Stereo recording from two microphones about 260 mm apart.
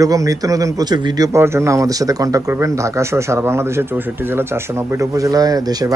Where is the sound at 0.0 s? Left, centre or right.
Centre.